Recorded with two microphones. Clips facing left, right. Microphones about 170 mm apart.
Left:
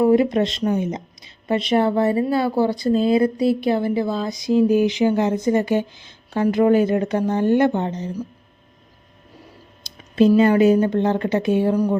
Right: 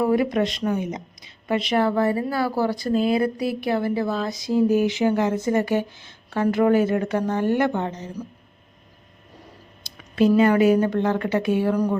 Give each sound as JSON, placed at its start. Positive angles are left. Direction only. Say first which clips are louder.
{"t": 0.0, "sound": "speech", "louder": "left 4 dB", "side_deg": 25}
{"t": 10.2, "sound": "speech", "louder": "left 3 dB", "side_deg": 25}